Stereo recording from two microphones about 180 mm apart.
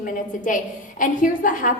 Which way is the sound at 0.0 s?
45° left (ahead or behind).